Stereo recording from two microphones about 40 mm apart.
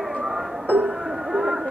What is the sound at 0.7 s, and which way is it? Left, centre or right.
Music, right.